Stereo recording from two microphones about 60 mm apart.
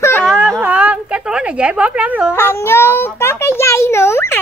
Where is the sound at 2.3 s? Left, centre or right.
Left.